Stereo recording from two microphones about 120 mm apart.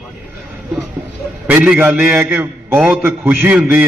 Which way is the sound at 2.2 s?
20° right (ahead or behind).